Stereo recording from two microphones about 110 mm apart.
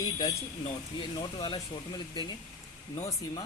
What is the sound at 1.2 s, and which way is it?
Speech, 45° left (ahead or behind).